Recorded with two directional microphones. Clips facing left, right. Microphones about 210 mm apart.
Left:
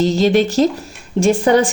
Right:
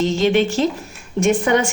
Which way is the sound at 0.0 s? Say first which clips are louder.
Left 3 dB; 35° left (ahead or behind).